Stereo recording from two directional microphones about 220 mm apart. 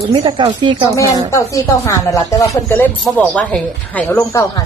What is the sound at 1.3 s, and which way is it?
Speech, 15° left (ahead or behind).